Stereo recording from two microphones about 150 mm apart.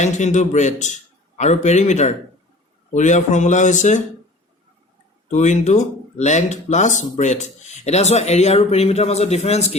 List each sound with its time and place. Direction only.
0.0 s speech: 50° left (ahead or behind)
5.3 s speech: 50° left (ahead or behind)